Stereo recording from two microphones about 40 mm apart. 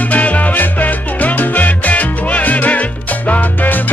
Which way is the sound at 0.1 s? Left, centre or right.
Left.